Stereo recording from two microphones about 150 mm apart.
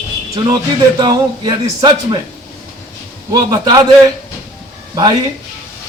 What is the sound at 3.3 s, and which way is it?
Speech, 30° right (ahead or behind).